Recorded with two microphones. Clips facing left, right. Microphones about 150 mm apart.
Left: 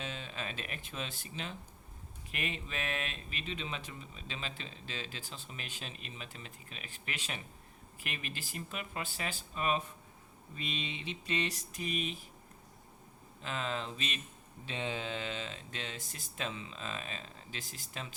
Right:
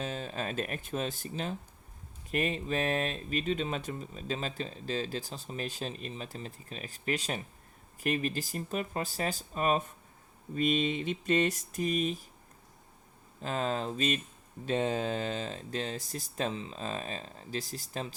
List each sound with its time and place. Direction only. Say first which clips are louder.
0.0 s speech: right 6 dB; 40° right (ahead or behind)
13.4 s speech: right 6 dB; 40° right (ahead or behind)